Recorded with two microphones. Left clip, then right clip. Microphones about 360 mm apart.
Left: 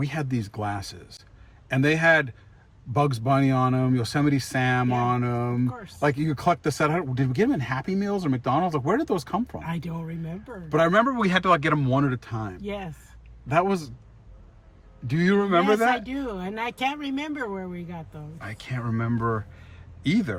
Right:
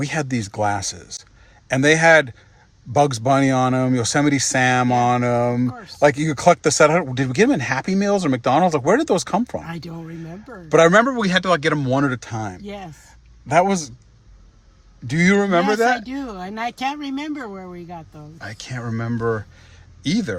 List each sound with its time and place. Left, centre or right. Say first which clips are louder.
0.0 s speech: right 7 dB; centre
10.7 s speech: right 7 dB; centre
13.5 s speech: right 6 dB; centre
15.1 s speech: right 5 dB; centre
18.3 s speech: right 4 dB; centre